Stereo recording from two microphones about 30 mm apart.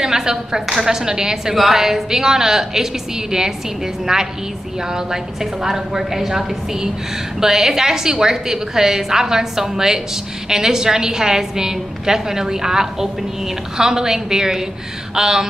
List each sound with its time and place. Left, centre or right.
0.0 s a woman's voice: right
1.5 s a woman's voice: centre